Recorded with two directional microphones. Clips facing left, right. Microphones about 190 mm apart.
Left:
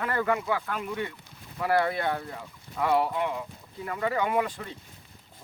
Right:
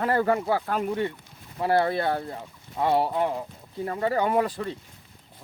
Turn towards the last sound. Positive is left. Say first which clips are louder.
# right 3 dB
turn(degrees=-35)  # may be behind; listen again after turning